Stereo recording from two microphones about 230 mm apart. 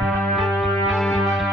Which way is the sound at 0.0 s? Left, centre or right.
Centre.